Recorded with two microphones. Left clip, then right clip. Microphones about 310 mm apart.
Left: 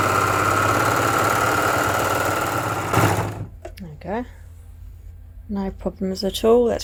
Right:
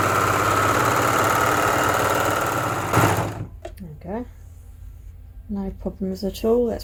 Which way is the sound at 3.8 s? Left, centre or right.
Left.